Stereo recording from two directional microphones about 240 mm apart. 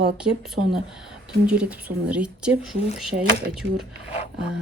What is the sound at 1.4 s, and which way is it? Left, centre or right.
Speech, centre.